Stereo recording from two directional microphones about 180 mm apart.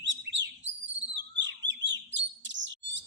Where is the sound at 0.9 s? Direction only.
85° right.